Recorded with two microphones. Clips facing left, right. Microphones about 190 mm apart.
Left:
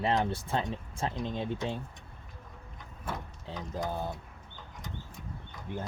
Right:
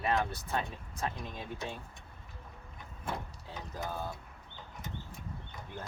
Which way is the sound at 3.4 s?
25° left (ahead or behind).